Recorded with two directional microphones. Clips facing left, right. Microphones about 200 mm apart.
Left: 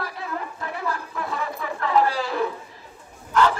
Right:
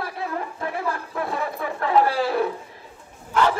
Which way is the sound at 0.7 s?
50° right (ahead or behind).